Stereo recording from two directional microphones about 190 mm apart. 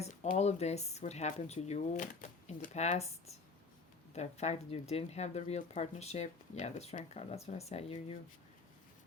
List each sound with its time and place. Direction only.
0.0 s speech: 40° left (ahead or behind)